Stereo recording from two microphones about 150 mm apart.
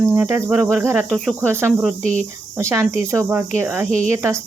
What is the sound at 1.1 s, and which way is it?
Cricket, centre (ahead or behind).